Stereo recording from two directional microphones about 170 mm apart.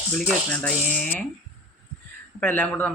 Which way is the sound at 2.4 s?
10° left (ahead or behind).